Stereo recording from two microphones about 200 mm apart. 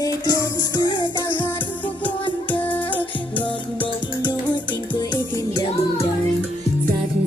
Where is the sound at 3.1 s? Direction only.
25° left (ahead or behind).